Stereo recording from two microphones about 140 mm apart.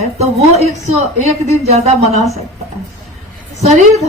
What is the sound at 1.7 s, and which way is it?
Speech, 55° right (ahead or behind).